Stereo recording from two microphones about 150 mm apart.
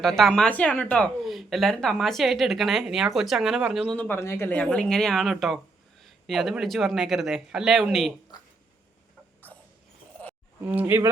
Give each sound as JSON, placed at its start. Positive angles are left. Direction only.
{"t": 0.0, "sound": "speech", "side_deg": 0}
{"t": 3.9, "sound": "speech", "side_deg": 10}
{"t": 9.5, "sound": "mechanisms", "side_deg": 10}
{"t": 10.7, "sound": "speech", "side_deg": -10}